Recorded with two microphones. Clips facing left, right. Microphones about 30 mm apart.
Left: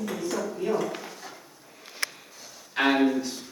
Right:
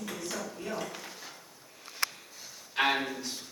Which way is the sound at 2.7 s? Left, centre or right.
Centre.